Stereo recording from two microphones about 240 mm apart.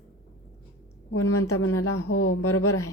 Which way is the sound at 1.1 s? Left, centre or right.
Left.